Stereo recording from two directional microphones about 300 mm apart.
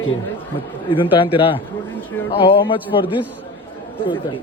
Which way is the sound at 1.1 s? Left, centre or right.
Centre.